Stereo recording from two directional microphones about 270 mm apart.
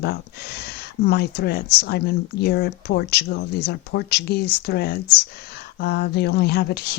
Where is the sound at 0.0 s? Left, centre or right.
Left.